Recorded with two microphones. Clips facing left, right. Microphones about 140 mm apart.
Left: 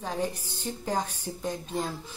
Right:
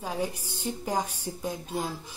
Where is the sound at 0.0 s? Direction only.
10° right (ahead or behind).